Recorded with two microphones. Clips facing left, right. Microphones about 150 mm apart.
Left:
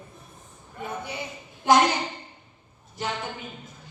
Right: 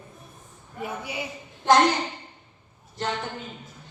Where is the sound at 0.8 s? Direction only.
10° right (ahead or behind).